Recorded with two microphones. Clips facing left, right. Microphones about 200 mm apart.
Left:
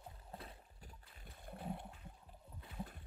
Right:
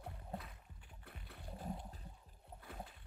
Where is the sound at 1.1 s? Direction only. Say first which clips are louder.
Right 4 dB; 65° right (ahead or behind).